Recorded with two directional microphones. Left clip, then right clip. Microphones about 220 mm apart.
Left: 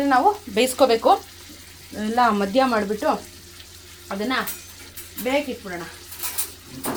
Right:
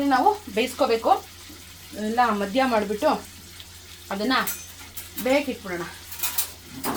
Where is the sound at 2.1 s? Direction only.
45° left (ahead or behind).